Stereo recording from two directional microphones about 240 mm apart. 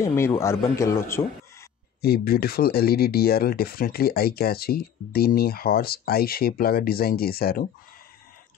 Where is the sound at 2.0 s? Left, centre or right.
Left.